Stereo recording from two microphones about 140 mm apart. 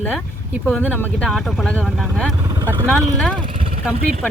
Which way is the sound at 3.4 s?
35° right (ahead or behind).